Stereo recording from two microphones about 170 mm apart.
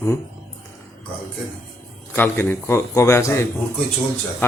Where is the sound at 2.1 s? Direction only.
10° left (ahead or behind).